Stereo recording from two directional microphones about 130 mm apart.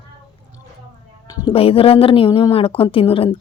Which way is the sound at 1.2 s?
30° left (ahead or behind).